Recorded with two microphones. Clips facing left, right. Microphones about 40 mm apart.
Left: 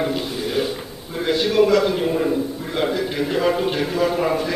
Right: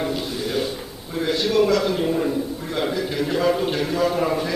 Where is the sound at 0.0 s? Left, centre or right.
Centre.